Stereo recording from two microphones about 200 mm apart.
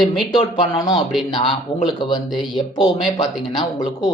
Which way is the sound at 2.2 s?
Centre (ahead or behind).